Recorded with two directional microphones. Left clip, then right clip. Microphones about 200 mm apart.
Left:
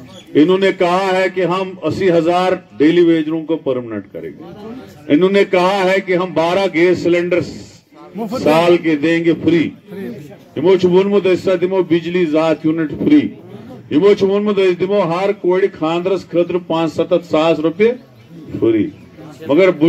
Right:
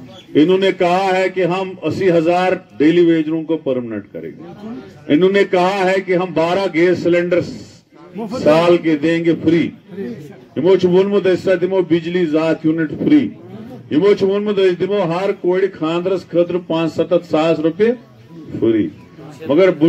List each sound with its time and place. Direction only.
0.3 s a man's voice: 5° left (ahead or behind)
5.0 s a man's voice: 5° left (ahead or behind)